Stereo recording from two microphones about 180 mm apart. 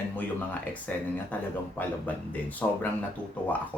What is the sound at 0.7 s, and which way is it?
Speech, 10° left (ahead or behind).